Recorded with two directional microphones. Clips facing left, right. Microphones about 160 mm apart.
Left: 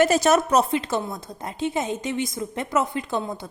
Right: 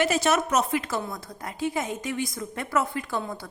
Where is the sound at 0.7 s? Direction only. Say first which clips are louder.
Left 3 dB; 25° left (ahead or behind).